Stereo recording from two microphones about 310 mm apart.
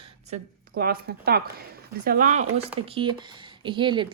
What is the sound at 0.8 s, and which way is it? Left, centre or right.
A woman's voice, right.